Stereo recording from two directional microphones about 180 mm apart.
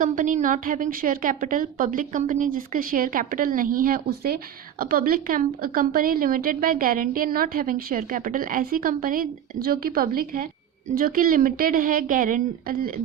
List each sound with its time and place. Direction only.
0.0 s a woman's voice: 45° right (ahead or behind)